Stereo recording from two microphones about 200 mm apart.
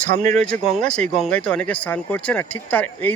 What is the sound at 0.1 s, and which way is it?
Speech, 35° right (ahead or behind).